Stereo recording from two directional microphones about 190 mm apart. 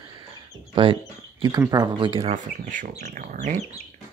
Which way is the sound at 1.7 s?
20° right (ahead or behind).